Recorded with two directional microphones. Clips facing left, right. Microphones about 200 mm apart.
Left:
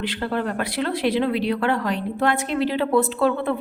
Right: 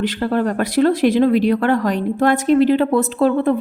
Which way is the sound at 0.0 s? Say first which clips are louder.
Right 6 dB; 45° right (ahead or behind).